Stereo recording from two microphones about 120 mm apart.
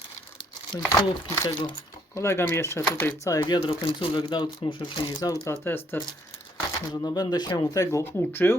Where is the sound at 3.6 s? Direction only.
45° left (ahead or behind).